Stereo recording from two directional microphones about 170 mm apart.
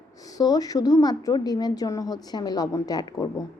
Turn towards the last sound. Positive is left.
turn(degrees=20)  # may be behind; listen again after turning